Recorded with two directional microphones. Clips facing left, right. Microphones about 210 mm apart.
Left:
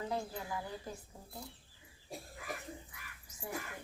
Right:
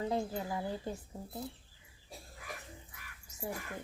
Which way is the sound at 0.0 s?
25° right (ahead or behind).